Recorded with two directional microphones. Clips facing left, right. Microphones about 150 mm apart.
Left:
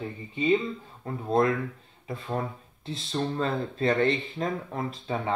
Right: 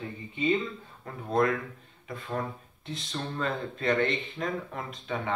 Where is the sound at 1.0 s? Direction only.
25° left (ahead or behind).